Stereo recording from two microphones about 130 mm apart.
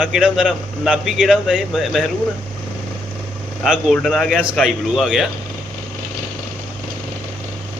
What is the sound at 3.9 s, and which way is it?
A man's voice, 5° left (ahead or behind).